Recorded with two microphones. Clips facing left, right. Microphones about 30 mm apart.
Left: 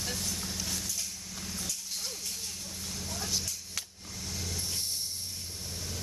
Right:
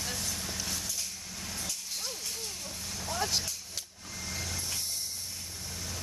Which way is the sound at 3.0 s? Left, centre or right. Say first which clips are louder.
Right 4 dB; right.